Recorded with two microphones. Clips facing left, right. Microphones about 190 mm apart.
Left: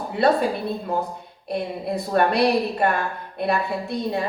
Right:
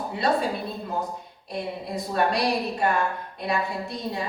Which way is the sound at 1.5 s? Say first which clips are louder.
Left 5 dB; 60° left (ahead or behind).